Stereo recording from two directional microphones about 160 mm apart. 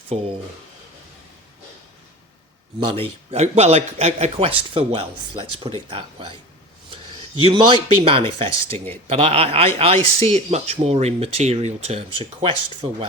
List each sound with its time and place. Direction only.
0.1 s a man's voice: 40° right (ahead or behind)
2.8 s a man's voice: 35° right (ahead or behind)
7.4 s a man's voice: 30° right (ahead or behind)